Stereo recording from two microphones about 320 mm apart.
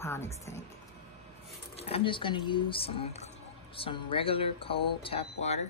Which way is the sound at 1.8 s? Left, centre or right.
Centre.